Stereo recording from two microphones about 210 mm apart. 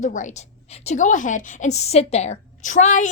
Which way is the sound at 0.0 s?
35° left (ahead or behind).